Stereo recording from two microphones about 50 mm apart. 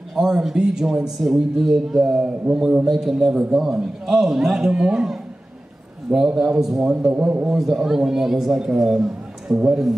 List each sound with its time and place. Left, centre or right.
0.1 s a man's voice: centre
2.9 s a man's voice: centre
7.1 s a man's voice: right
7.4 s a man's voice: centre
8.8 s a sound: centre